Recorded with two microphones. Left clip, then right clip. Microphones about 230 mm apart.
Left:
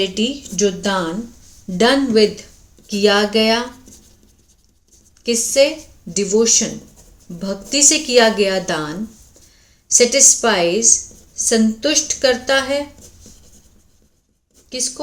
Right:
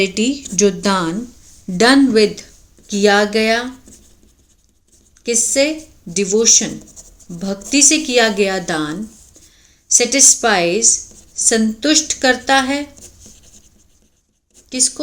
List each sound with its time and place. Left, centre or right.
0.0 s a woman's voice: right
5.2 s a woman's voice: centre